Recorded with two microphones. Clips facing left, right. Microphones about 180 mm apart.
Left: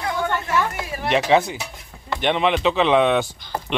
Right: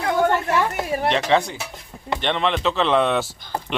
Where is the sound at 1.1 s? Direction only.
5° left (ahead or behind).